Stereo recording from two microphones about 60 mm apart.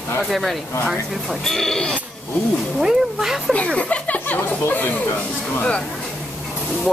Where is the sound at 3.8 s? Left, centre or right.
Left.